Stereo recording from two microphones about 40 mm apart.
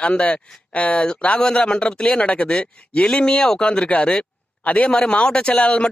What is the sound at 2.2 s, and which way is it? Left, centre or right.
Speech, left.